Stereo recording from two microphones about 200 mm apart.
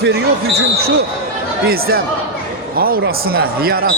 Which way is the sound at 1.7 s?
50° right (ahead or behind).